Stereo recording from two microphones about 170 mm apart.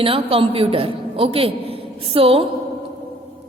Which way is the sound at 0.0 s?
35° right (ahead or behind).